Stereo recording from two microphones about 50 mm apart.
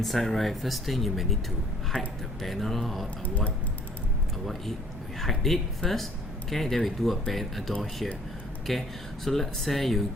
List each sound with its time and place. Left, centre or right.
0.0 s speech: centre
3.2 s speech: left
5.2 s speech: centre